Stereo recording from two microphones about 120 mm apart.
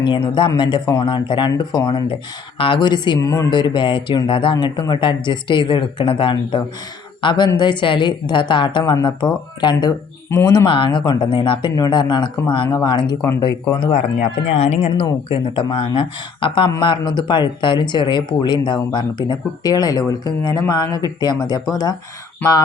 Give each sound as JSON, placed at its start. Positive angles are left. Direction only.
{"t": 0.0, "sound": "speech", "side_deg": 40}
{"t": 3.2, "sound": "a woman's voice", "side_deg": 25}
{"t": 3.5, "sound": "speech", "side_deg": 40}
{"t": 10.2, "sound": "speech", "side_deg": 20}
{"t": 10.7, "sound": "speech", "side_deg": 45}
{"t": 13.7, "sound": "speech", "side_deg": 55}
{"t": 15.3, "sound": "speech", "side_deg": 45}